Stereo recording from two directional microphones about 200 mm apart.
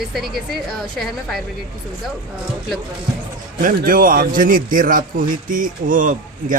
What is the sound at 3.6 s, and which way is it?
Speech, 45° right (ahead or behind).